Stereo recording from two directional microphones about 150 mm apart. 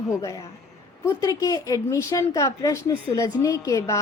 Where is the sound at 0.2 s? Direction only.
20° left (ahead or behind).